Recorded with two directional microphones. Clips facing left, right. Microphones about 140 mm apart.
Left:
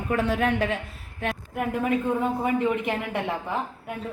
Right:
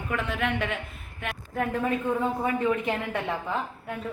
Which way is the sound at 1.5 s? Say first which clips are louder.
Left 1 dB; 10° left (ahead or behind).